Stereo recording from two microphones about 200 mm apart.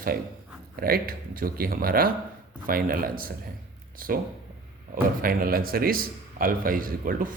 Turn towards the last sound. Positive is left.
turn(degrees=-45)  # may be behind; listen again after turning